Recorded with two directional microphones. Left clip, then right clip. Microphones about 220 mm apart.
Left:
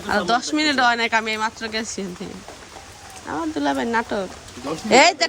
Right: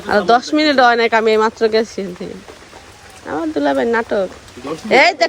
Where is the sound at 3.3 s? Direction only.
10° left (ahead or behind).